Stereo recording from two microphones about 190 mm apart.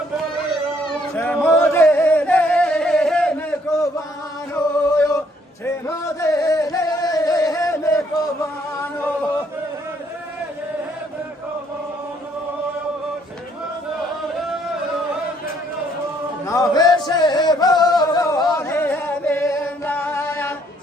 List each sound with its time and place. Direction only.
0.9 s singing: 10° left (ahead or behind)
4.5 s singing: 10° left (ahead or behind)
5.6 s music: 15° left (ahead or behind)
16.5 s music: 20° left (ahead or behind)